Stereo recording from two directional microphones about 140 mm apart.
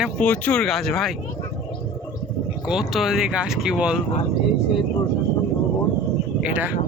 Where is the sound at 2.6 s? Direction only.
5° right (ahead or behind).